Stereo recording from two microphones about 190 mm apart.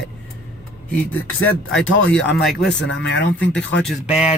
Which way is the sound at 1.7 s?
85° left.